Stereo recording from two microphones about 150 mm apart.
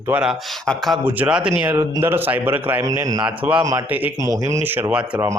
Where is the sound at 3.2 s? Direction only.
10° right (ahead or behind).